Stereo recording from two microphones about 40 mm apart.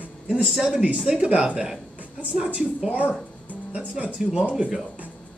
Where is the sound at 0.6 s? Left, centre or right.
Centre.